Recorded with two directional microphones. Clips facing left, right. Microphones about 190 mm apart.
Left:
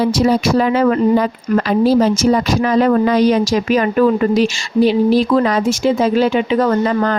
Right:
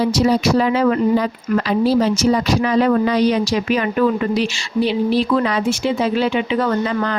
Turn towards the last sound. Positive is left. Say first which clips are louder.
# left 4 dB
turn(degrees=45)  # may be behind; listen again after turning